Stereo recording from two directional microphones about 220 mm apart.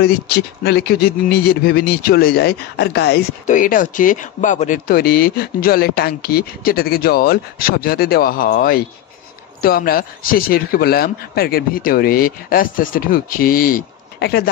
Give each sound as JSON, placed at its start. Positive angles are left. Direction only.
{"t": 0.0, "sound": "a man's voice", "side_deg": 45}